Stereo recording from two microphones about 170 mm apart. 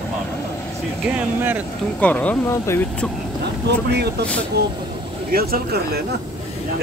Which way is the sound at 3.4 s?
80° right.